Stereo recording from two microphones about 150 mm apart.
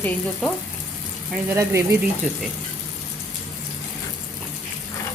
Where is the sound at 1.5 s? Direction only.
20° right (ahead or behind).